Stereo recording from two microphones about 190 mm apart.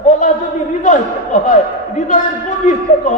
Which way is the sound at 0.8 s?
40° left (ahead or behind).